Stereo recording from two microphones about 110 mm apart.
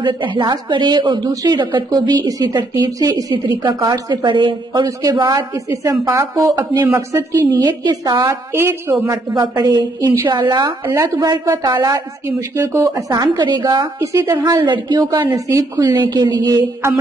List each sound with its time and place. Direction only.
0.0 s a woman's voice: 45° right (ahead or behind)
5.9 s a woman's voice: 25° right (ahead or behind)
7.2 s a woman's voice: 40° right (ahead or behind)
8.5 s a woman's voice: 20° right (ahead or behind)
9.3 s a woman's voice: 40° right (ahead or behind)
11.9 s a woman's voice: 25° right (ahead or behind)
15.3 s a woman's voice: 30° right (ahead or behind)
16.0 s a woman's voice: 40° right (ahead or behind)